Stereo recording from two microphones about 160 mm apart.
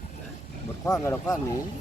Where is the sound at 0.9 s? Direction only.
25° left (ahead or behind).